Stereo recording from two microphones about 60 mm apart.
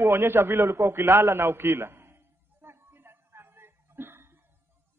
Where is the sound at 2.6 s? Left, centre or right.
Right.